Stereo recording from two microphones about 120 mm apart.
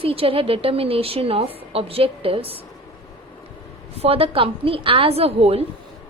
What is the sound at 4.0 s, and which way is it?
A woman's voice, 55° right (ahead or behind).